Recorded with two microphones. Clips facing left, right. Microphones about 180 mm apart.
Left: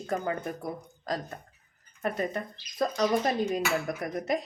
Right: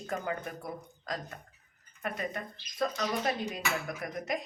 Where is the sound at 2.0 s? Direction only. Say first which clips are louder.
Left 6 dB; 35° left (ahead or behind).